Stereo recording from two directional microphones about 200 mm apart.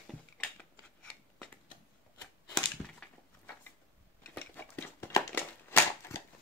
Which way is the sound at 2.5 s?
5° left (ahead or behind).